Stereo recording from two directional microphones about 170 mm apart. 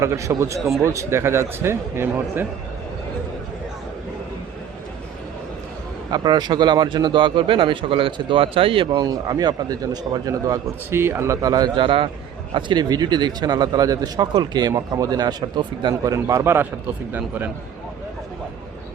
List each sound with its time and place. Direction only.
0.0 s a man's voice: 15° right (ahead or behind)
0.6 s speech: centre (ahead or behind)
0.9 s a man's voice: 15° right (ahead or behind)
6.1 s a man's voice: 25° right (ahead or behind)